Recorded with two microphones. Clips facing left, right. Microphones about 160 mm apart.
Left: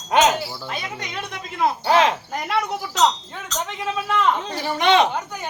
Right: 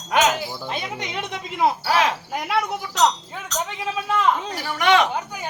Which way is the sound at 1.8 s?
25° left (ahead or behind).